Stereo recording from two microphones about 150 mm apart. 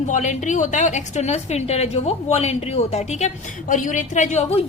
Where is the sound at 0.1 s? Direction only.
55° left (ahead or behind).